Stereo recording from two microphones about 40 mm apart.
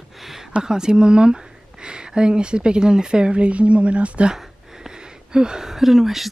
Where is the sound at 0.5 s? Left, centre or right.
Centre.